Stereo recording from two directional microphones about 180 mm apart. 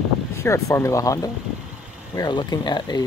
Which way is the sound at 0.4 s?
15° left (ahead or behind).